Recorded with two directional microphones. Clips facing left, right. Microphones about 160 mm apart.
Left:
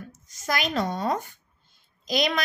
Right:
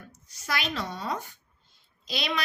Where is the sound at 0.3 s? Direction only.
45° left (ahead or behind).